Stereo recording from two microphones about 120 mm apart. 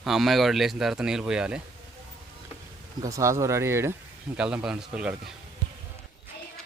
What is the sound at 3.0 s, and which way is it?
Speech, 25° right (ahead or behind).